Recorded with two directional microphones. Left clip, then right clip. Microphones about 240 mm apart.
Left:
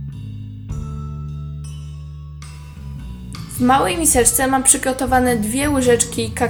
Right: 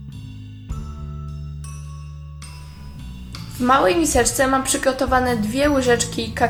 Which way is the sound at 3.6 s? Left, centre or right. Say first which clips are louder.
Even; left.